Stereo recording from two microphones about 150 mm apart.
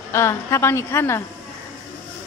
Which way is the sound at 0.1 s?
15° left (ahead or behind).